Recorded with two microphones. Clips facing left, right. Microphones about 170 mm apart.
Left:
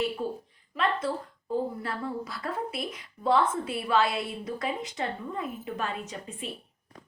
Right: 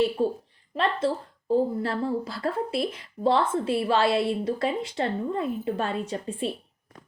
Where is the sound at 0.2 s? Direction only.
30° right (ahead or behind).